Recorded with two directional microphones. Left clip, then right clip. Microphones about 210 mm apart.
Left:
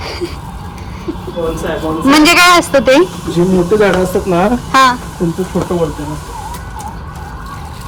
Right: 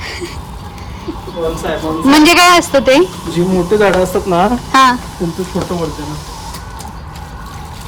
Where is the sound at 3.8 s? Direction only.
5° right (ahead or behind).